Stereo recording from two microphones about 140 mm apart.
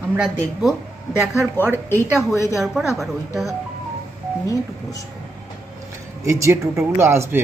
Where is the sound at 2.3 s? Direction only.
20° left (ahead or behind).